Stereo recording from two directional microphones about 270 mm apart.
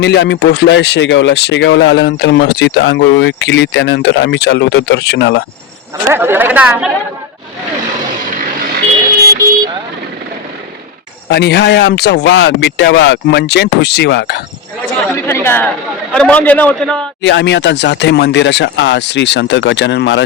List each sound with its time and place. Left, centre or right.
0.0 s speech: left
6.1 s a woman's voice: centre
11.3 s speech: left
15.0 s a man's voice: centre
17.2 s speech: left